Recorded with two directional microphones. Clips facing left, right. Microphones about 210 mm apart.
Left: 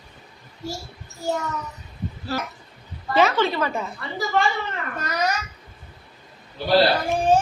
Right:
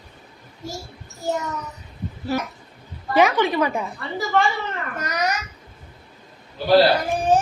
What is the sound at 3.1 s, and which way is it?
Speech, 15° right (ahead or behind).